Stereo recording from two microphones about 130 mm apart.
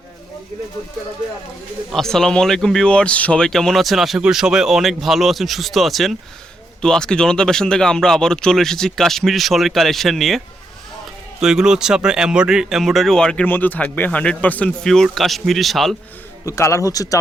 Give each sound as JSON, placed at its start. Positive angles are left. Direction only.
{"t": 1.9, "sound": "a man's voice", "side_deg": 5}
{"t": 16.5, "sound": "a man's voice", "side_deg": 20}